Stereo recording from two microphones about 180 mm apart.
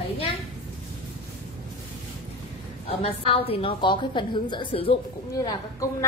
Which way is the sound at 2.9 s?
30° left (ahead or behind).